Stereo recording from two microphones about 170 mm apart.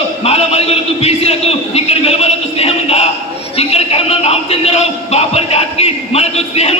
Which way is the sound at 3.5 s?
35° left (ahead or behind).